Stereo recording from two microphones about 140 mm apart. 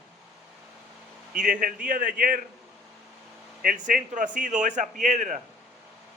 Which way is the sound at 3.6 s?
85° right.